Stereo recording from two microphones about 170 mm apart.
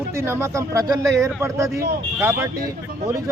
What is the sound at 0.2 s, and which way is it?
A man's voice, 15° right (ahead or behind).